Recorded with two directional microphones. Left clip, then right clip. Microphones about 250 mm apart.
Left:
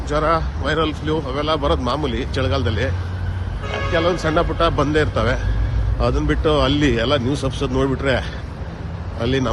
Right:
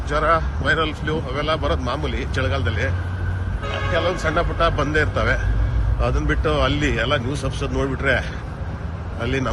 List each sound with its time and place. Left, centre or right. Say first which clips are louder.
0.1 s speech: even; centre
3.9 s a man's voice: left 3 dB; left